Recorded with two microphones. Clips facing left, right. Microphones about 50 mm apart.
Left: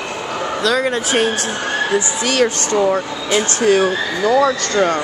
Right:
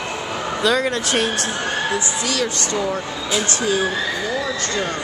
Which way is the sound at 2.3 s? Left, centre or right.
Left.